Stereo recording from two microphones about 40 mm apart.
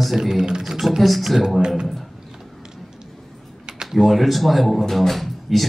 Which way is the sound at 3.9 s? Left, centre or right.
Centre.